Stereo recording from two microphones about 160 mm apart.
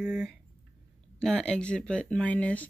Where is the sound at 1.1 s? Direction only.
5° left (ahead or behind).